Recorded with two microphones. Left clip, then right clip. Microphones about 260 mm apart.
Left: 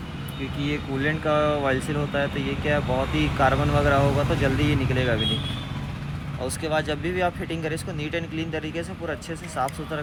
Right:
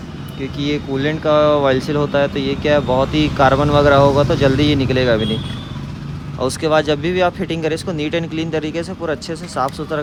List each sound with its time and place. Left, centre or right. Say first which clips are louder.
0.7 s speech: right 7 dB; right
6.4 s speech: right 10 dB; right